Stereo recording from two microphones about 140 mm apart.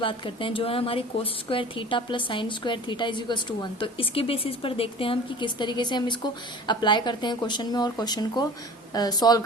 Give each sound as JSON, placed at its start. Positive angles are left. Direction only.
{"t": 0.0, "sound": "a woman's voice", "side_deg": 35}